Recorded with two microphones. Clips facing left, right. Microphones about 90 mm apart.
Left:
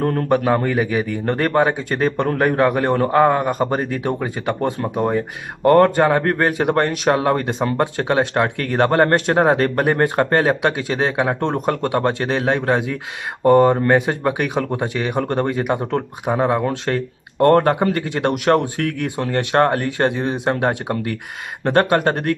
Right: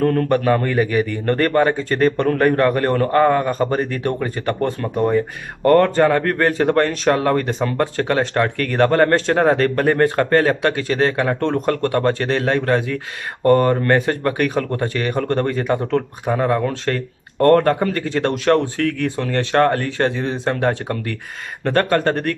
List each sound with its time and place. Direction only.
0.3 s a man's voice: 15° left (ahead or behind)